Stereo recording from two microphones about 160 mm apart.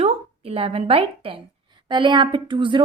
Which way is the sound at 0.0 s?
35° right (ahead or behind).